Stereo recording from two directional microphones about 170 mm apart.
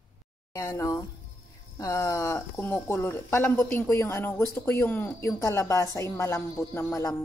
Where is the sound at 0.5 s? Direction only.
20° left (ahead or behind).